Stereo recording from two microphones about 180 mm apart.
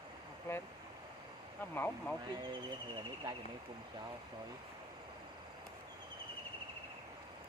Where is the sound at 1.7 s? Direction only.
10° left (ahead or behind).